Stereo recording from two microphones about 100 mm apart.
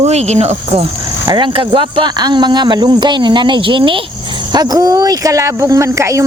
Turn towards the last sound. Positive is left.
turn(degrees=-30)  # may be behind; listen again after turning